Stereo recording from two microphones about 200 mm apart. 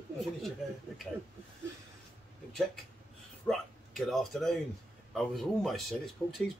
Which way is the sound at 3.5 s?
5° left (ahead or behind).